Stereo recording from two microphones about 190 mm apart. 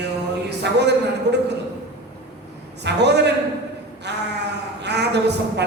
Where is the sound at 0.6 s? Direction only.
65° right (ahead or behind).